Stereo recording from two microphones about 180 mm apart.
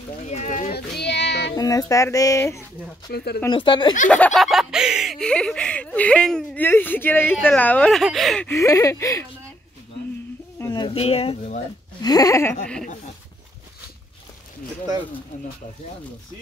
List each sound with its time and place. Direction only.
0.3 s speech: 40° left (ahead or behind)
0.7 s a sound: 65° left (ahead or behind)
1.5 s speech: 20° left (ahead or behind)
3.1 s speech: 65° left (ahead or behind)
3.4 s speech: 25° left (ahead or behind)
4.1 s speech: 5° left (ahead or behind)
8.5 s speech: 15° left (ahead or behind)
10.6 s a sound: 20° left (ahead or behind)
10.9 s speech: 35° left (ahead or behind)
12.0 s speech: 20° left (ahead or behind)